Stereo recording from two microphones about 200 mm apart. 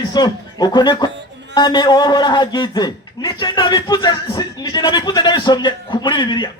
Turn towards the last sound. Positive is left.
turn(degrees=20)  # may be behind; listen again after turning